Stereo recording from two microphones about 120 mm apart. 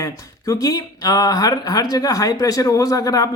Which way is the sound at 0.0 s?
30° left (ahead or behind).